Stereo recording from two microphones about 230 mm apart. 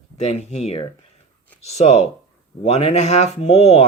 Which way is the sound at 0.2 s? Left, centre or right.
Left.